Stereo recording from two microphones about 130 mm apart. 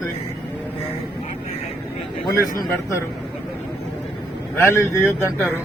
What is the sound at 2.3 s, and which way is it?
Speech, 25° left (ahead or behind).